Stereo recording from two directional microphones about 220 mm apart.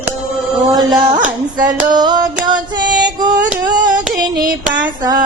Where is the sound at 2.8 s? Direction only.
20° right (ahead or behind).